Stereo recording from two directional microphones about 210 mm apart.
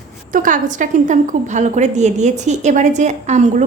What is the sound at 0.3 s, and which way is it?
A woman's voice, 40° right (ahead or behind).